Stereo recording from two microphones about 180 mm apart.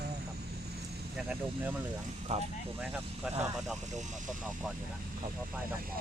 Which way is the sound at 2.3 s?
40° right (ahead or behind).